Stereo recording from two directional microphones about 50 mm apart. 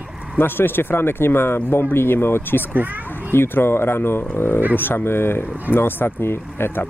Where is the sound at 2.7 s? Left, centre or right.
Right.